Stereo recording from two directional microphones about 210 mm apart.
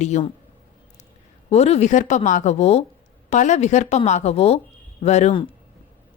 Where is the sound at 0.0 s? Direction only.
35° left (ahead or behind).